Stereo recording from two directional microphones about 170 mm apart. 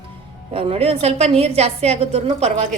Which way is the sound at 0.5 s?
35° right (ahead or behind).